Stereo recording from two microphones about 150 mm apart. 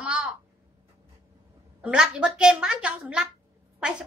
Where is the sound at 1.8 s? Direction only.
5° right (ahead or behind).